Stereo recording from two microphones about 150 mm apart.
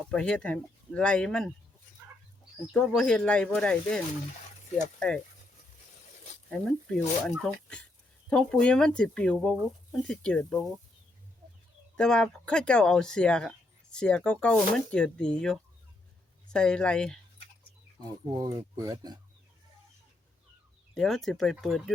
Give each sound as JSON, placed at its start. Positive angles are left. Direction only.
{"t": 0.1, "sound": "speech", "side_deg": 5}
{"t": 2.7, "sound": "speech", "side_deg": 5}
{"t": 6.5, "sound": "speech", "side_deg": 5}
{"t": 11.9, "sound": "speech", "side_deg": 5}
{"t": 18.3, "sound": "speech", "side_deg": -25}
{"t": 20.9, "sound": "speech", "side_deg": 0}